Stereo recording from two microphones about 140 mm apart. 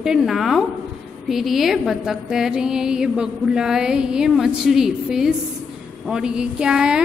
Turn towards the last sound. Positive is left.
turn(degrees=-5)  # may be behind; listen again after turning